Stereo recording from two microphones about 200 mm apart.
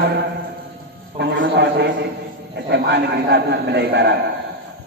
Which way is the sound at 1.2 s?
60° right (ahead or behind).